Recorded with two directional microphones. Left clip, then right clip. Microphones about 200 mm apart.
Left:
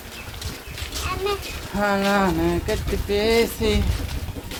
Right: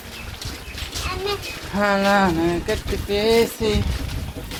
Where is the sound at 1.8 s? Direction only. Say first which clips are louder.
Right 3 dB; 40° right (ahead or behind).